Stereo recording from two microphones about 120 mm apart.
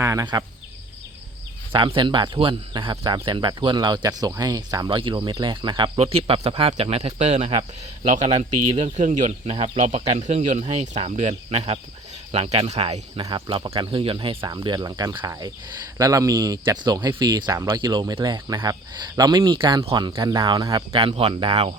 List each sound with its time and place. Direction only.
0.0 s a sound: 25° right (ahead or behind)
1.7 s speech: 45° right (ahead or behind); by 7.6 s 65° right (ahead or behind)
8.7 s speech: 80° right; by 13.0 s 65° right (ahead or behind)
13.3 s speech: 45° right (ahead or behind)
20.1 s speech: 30° right (ahead or behind); by 21.8 s 55° right (ahead or behind)